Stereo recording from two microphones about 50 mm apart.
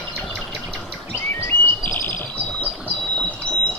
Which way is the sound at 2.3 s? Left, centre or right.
Left.